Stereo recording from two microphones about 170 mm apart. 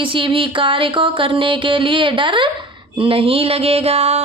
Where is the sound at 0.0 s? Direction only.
30° right (ahead or behind).